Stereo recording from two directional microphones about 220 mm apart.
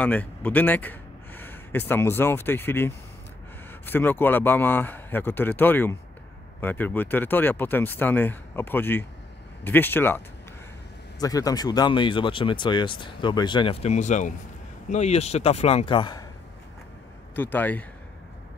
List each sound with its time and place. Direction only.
0.0 s speech: 5° left (ahead or behind)
17.4 s speech: 10° left (ahead or behind)